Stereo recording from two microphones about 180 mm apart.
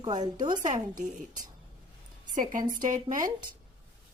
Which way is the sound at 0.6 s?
45° right (ahead or behind).